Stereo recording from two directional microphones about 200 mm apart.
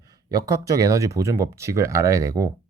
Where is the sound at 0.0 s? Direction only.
20° right (ahead or behind).